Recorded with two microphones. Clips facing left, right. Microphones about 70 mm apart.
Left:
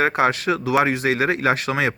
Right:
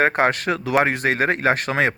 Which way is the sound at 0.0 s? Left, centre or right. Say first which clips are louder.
Even; right.